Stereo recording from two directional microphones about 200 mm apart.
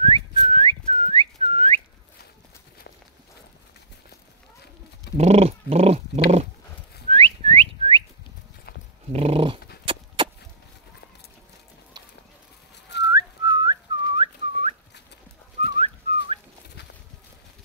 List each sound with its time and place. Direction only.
0.0 s whistling: 25° right (ahead or behind)
5.1 s dog: 30° right (ahead or behind)
7.1 s whistling: 30° right (ahead or behind)
9.1 s dog: 30° right (ahead or behind)
9.8 s vehicle: 25° right (ahead or behind)
13.1 s whistling: 20° right (ahead or behind)